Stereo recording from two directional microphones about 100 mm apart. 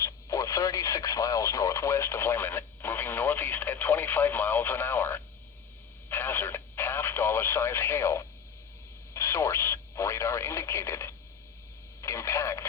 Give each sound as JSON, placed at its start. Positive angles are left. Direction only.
{"t": 0.0, "sound": "radio", "side_deg": 35}
{"t": 12.0, "sound": "speech", "side_deg": 30}